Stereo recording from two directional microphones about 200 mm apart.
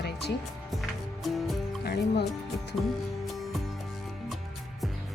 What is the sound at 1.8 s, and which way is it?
Speech, 55° left (ahead or behind).